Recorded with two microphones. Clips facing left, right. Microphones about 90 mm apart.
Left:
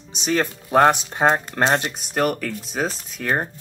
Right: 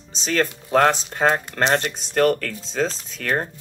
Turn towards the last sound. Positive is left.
turn(degrees=15)  # may be behind; listen again after turning